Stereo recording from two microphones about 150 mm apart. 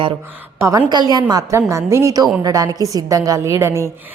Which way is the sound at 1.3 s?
20° right (ahead or behind).